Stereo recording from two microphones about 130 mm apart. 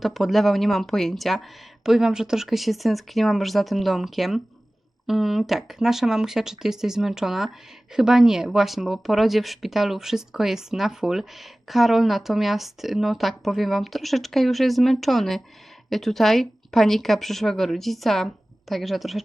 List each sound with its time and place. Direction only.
0.0 s speech: centre (ahead or behind)